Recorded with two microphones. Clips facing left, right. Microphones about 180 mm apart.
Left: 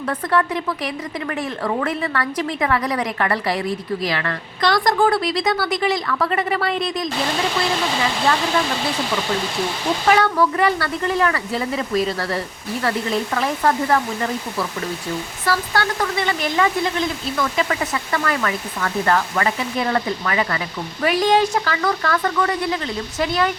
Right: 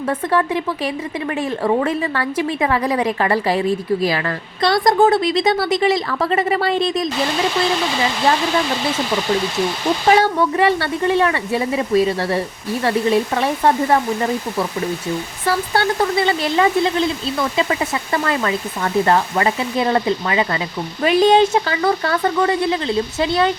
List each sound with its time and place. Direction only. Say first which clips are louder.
0.1 s speech: right 2 dB; 30° right (ahead or behind)
1.6 s speech: right 5 dB; 25° right (ahead or behind)
10.1 s speech: right 2 dB; 25° right (ahead or behind)